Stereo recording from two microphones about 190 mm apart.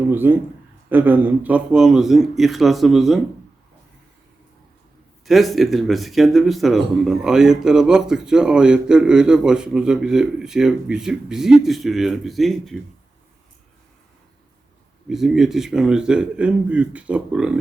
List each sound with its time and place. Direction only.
0.1 s a man's voice: 10° right (ahead or behind)
5.2 s speech: centre (ahead or behind)
15.1 s speech: centre (ahead or behind)